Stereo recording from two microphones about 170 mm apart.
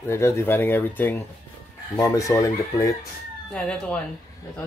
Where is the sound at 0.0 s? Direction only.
15° left (ahead or behind).